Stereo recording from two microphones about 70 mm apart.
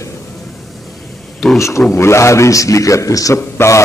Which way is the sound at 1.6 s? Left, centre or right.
Left.